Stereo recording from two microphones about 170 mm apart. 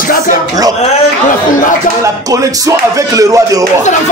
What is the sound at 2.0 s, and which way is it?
Speech, 20° right (ahead or behind).